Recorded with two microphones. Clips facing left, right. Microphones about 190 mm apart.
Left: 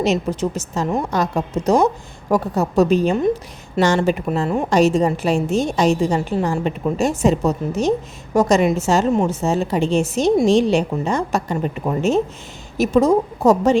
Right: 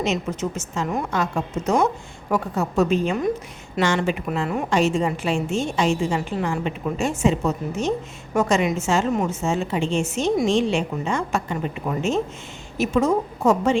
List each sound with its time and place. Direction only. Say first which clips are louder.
0.0 s a woman's voice: left 5 dB; 35° left (ahead or behind)